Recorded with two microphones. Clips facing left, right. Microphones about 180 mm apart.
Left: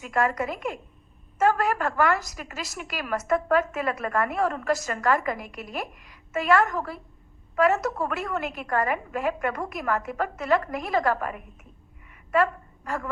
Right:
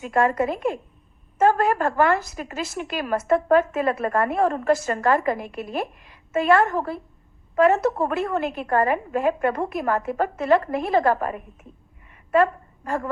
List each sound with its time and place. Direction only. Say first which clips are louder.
0.0 s a woman's voice: right 5 dB; 30° right (ahead or behind)